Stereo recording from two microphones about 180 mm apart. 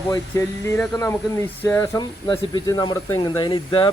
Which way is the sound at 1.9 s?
25° left (ahead or behind).